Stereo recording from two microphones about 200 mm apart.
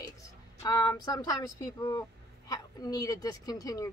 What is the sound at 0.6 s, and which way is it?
A woman's voice, 20° left (ahead or behind).